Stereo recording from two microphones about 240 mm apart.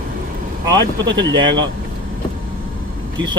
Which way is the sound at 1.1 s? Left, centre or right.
Centre.